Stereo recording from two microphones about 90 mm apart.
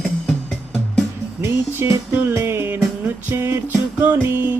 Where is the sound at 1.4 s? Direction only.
30° right (ahead or behind).